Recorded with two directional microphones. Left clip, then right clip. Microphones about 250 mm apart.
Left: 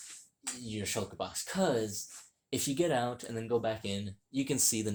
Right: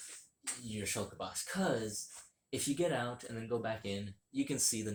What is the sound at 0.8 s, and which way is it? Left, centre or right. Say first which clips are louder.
Speech: left 4 dB; left.